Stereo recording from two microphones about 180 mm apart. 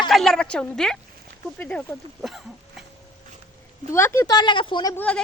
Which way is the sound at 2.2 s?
Centre (ahead or behind).